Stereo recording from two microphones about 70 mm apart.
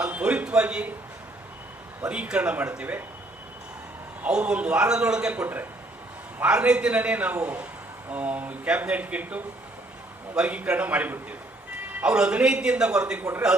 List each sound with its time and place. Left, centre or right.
0.0 s a sound: centre
2.0 s a man's voice: centre
4.2 s a man's voice: centre